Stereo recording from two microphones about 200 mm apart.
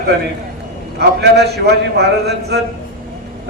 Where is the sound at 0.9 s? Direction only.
55° right (ahead or behind).